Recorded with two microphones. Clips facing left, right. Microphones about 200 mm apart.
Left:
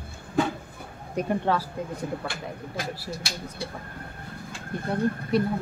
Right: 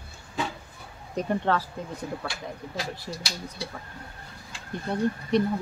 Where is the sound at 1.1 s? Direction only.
10° left (ahead or behind).